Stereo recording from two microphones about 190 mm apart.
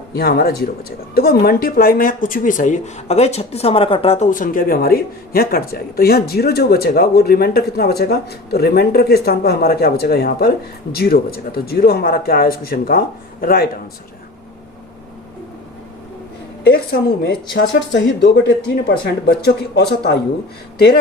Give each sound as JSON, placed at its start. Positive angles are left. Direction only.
{"t": 0.1, "sound": "speech", "side_deg": 55}
{"t": 16.6, "sound": "a woman's voice", "side_deg": 55}